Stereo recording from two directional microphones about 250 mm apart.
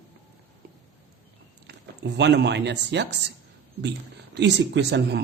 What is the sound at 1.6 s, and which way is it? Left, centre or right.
A man's voice, right.